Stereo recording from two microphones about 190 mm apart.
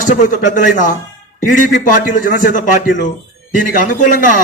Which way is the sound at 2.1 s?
45° left (ahead or behind).